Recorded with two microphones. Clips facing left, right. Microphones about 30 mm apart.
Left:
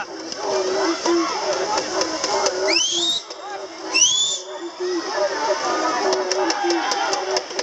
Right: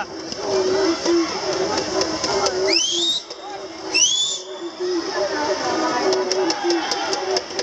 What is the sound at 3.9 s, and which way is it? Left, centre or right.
Whistle, centre.